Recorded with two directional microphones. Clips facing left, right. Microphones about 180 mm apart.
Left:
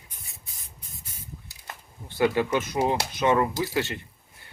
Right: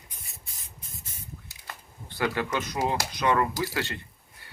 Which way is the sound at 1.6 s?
20° left (ahead or behind).